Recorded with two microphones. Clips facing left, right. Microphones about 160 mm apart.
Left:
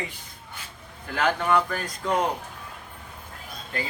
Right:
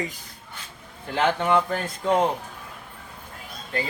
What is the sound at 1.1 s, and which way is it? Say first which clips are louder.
Speech: right 2 dB; 25° right (ahead or behind).